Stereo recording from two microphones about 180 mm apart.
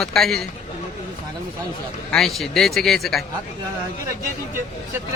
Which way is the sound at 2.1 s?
Centre (ahead or behind).